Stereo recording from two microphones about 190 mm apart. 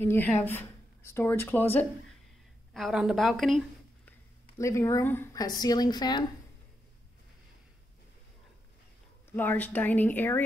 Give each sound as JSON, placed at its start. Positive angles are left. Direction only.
{"t": 0.0, "sound": "speech", "side_deg": 10}
{"t": 2.7, "sound": "a woman's voice", "side_deg": 0}
{"t": 4.6, "sound": "a woman's voice", "side_deg": 15}
{"t": 9.3, "sound": "speech", "side_deg": 10}